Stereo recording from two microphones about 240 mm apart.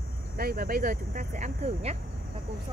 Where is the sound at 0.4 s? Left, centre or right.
Right.